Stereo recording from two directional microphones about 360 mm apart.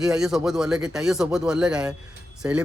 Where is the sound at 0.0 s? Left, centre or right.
Centre.